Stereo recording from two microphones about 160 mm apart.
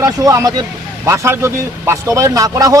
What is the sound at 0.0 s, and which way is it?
A man's voice, 20° right (ahead or behind).